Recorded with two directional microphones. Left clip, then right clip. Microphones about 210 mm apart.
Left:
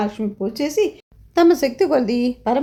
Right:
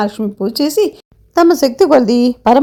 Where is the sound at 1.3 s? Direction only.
20° right (ahead or behind).